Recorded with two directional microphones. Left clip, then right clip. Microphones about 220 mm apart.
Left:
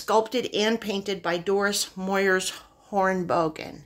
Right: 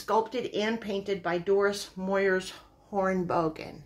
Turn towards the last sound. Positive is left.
turn(degrees=35)  # may be behind; listen again after turning